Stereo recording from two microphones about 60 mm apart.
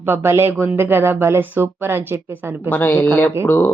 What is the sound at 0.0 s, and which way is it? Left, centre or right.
Speech, right.